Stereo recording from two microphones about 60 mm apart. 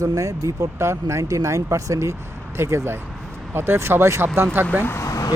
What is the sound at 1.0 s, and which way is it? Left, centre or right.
Speech, right.